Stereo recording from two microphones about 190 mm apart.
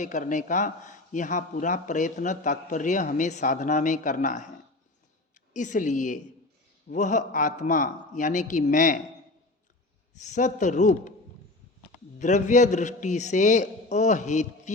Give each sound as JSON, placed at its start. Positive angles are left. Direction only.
{"t": 0.0, "sound": "a man's voice", "side_deg": 40}
{"t": 5.5, "sound": "a man's voice", "side_deg": 40}
{"t": 10.2, "sound": "a man's voice", "side_deg": 40}
{"t": 12.2, "sound": "a man's voice", "side_deg": 40}